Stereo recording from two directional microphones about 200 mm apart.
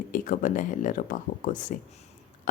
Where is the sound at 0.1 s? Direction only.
40° left (ahead or behind).